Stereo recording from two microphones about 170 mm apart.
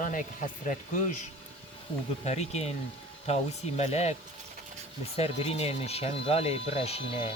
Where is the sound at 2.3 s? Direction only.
40° left (ahead or behind).